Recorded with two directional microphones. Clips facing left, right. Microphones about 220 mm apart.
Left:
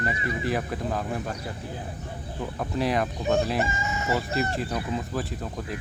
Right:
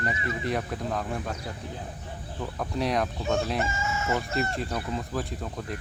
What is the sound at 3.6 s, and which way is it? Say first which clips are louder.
Chicken: left 1 dB; 15° left (ahead or behind).